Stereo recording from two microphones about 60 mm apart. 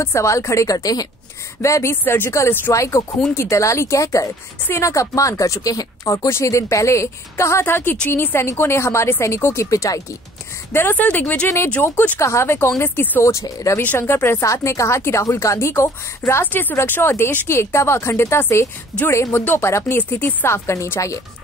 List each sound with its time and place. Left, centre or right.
0.0 s a woman's voice: left
1.6 s speech: left
2.7 s a woman's voice: left
6.2 s speech: left
8.5 s speech: left
10.7 s speech: left
11.0 s speech: left
12.2 s speech: left
13.2 s a woman's voice: left
13.9 s speech: left
14.4 s a woman's voice: left
16.4 s speech: left
20.0 s speech: left